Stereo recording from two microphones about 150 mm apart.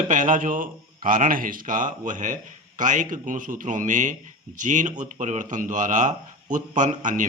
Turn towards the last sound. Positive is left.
turn(degrees=-60)  # may be behind; listen again after turning